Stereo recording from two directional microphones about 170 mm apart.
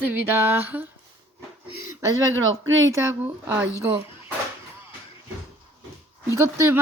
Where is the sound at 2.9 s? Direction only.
15° right (ahead or behind).